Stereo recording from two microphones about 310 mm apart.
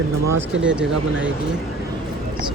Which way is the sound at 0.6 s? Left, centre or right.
Centre.